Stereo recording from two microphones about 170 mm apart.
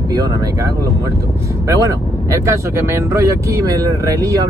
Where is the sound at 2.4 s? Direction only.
15° right (ahead or behind).